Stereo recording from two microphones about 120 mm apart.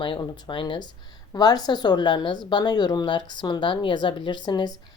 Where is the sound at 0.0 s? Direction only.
40° left (ahead or behind).